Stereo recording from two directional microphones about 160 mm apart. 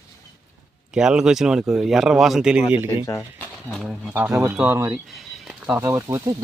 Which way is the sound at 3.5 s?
Centre (ahead or behind).